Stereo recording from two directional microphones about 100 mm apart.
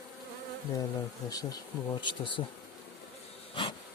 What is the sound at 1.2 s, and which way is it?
Speech, 40° left (ahead or behind).